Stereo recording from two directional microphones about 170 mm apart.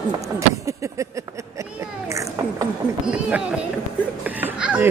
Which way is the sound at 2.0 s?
20° right (ahead or behind).